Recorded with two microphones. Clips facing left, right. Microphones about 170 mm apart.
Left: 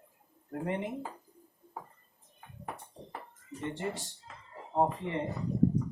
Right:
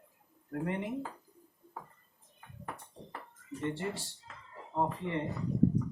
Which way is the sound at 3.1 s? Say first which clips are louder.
Right 1 dB; 20° left (ahead or behind).